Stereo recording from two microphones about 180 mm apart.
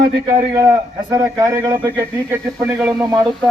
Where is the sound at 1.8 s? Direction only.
10° right (ahead or behind).